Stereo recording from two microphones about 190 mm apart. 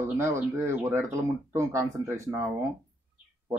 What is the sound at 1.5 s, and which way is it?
Speech, 15° right (ahead or behind).